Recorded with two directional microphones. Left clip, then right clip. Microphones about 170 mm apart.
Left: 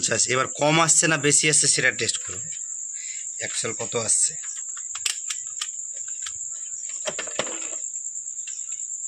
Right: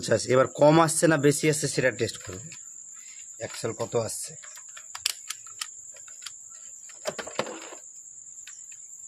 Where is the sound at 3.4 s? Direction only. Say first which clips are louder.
Left 2 dB; 50° right (ahead or behind).